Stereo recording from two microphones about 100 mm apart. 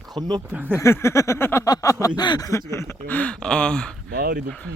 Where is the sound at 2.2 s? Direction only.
45° left (ahead or behind).